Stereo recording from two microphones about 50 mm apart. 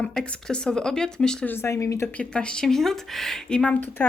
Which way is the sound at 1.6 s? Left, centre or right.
Left.